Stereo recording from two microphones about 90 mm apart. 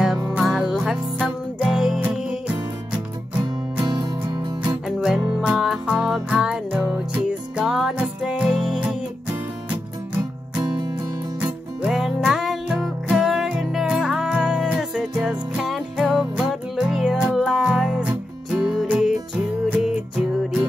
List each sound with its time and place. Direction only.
0.3 s music: 10° right (ahead or behind)
3.8 s music: 50° right (ahead or behind)
4.6 s music: 10° right (ahead or behind)
10.6 s music: 50° right (ahead or behind)
11.8 s music: 5° right (ahead or behind)